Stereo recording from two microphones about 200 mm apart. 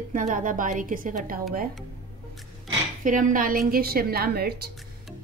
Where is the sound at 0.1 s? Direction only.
40° right (ahead or behind).